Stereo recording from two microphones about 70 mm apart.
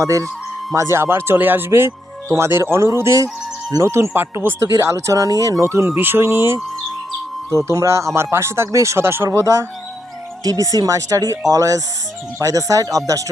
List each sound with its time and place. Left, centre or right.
0.0 s speech: right
4.8 s speech: right
10.4 s speech: right